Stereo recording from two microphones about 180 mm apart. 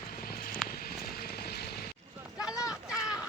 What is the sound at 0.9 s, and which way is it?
Vehicle, 60° left (ahead or behind).